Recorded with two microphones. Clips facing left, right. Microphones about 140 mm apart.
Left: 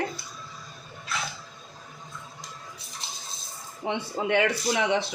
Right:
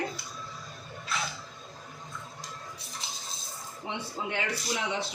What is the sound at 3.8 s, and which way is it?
Speech, 70° left (ahead or behind).